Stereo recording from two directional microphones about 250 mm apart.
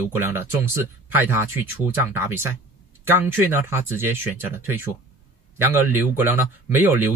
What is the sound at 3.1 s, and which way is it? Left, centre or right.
Speech, centre.